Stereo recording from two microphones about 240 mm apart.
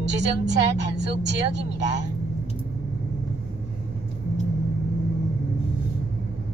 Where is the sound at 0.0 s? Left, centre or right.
Right.